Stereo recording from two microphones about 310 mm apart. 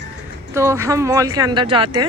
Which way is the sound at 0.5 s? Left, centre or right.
Centre.